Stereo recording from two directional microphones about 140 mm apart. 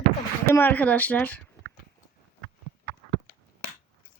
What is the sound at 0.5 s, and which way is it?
Speech, 10° left (ahead or behind).